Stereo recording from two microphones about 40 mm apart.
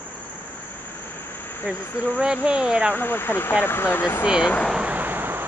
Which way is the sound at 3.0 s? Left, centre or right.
Left.